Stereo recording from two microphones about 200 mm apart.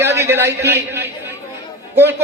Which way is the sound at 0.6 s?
55° right (ahead or behind).